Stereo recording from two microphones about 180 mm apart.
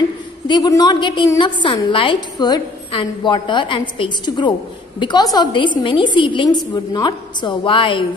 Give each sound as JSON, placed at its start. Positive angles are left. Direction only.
{"t": 0.5, "sound": "a woman's voice", "side_deg": 20}